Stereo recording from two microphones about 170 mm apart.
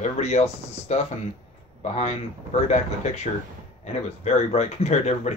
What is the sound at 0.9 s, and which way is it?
Speech, 40° left (ahead or behind).